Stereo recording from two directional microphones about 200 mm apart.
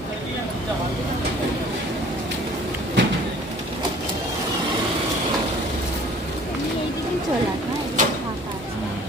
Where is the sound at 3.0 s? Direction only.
65° right (ahead or behind).